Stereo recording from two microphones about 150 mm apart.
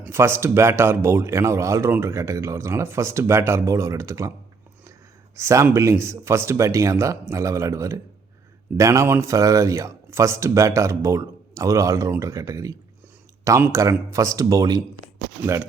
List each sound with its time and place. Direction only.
0.0 s a man's voice: 15° right (ahead or behind)
5.4 s a man's voice: 20° right (ahead or behind)